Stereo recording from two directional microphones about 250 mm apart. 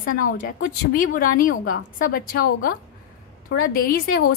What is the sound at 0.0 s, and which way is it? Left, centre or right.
Speech, left.